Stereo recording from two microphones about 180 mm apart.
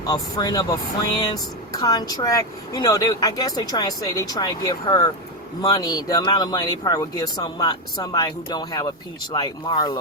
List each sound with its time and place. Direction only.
0.0 s speech: 20° left (ahead or behind)